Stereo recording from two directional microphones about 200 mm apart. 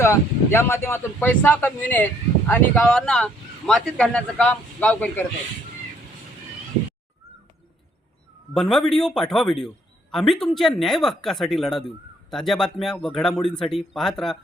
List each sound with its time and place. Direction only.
0.0 s speech: 15° left (ahead or behind)
8.5 s speech: centre (ahead or behind)